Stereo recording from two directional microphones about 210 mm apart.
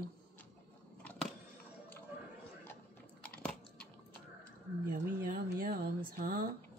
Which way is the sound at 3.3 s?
5° left (ahead or behind).